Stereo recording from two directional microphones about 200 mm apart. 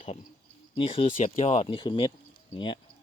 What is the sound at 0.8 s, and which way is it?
Speech, 25° left (ahead or behind).